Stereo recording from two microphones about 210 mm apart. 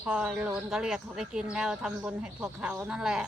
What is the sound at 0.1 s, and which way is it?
Speech, 5° right (ahead or behind).